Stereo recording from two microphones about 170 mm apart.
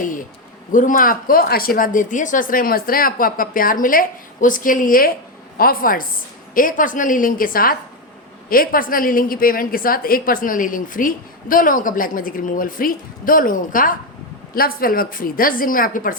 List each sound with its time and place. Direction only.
0.7 s a woman's voice: 50° left (ahead or behind)